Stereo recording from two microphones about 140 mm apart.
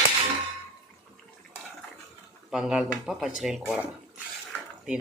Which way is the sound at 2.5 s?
5° right (ahead or behind).